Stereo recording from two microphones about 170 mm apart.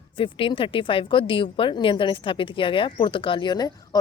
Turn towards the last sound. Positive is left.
turn(degrees=25)  # may be behind; listen again after turning